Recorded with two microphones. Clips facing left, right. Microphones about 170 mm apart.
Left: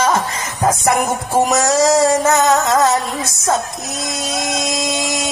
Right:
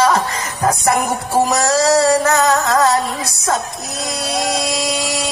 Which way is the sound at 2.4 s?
20° left (ahead or behind).